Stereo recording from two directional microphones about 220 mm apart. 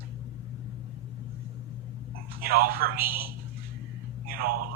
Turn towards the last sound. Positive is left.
turn(degrees=-40)  # may be behind; listen again after turning